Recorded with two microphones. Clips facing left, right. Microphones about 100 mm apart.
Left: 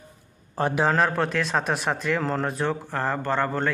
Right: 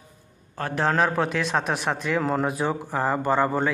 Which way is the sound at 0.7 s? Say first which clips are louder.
Right 1 dB; centre (ahead or behind).